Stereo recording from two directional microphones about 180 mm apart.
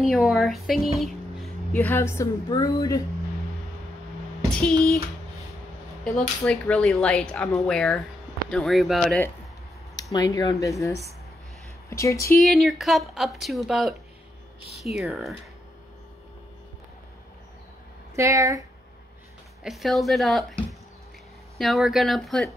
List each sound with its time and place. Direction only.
0.0 s speech: centre (ahead or behind); by 3.0 s 20° left (ahead or behind)
4.5 s a sound: 5° left (ahead or behind)
6.1 s speech: 5° left (ahead or behind)
10.1 s speech: 20° left (ahead or behind)
11.9 s speech: 15° left (ahead or behind)
12.4 s speech: centre (ahead or behind)
18.1 s speech: 15° right (ahead or behind)
19.6 s speech: centre (ahead or behind)
21.5 s speech: centre (ahead or behind)